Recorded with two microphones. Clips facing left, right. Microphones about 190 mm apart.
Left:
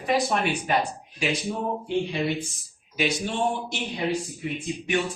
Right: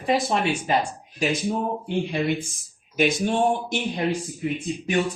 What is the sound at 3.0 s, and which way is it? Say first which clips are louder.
Speech: right 5 dB; 50° right (ahead or behind).